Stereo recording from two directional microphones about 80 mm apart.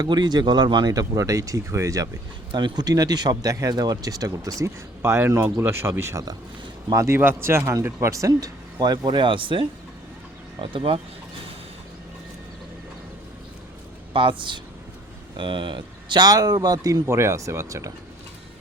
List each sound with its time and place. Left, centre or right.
0.0 s speech: right
2.5 s speech: right
5.0 s speech: right
7.2 s a man's voice: right
14.1 s a man's voice: right